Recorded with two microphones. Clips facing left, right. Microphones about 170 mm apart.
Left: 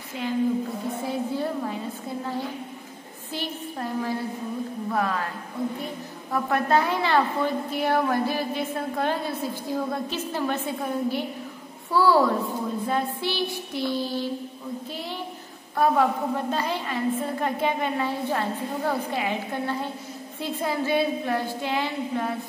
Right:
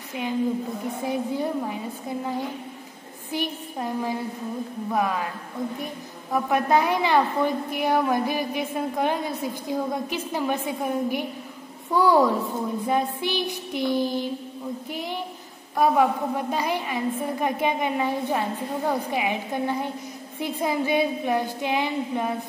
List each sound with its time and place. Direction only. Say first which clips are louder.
1.0 s a woman's voice: right 2 dB; 15° right (ahead or behind)
6.3 s a woman's voice: right 1 dB; 15° right (ahead or behind)